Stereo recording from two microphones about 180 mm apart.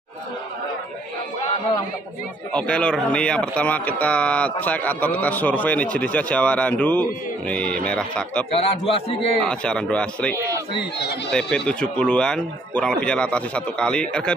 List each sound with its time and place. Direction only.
2.5 s speech: 5° left (ahead or behind)
8.5 s a man's voice: 35° left (ahead or behind)
9.4 s speech: 5° left (ahead or behind)
10.8 s speech: 65° left (ahead or behind)
11.3 s speech: 5° left (ahead or behind)